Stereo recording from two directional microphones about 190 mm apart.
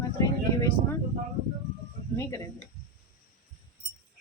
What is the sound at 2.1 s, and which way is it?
Speech, 15° left (ahead or behind).